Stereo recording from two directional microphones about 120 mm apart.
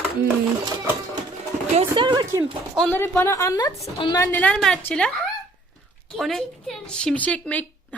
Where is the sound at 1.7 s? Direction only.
45° right (ahead or behind).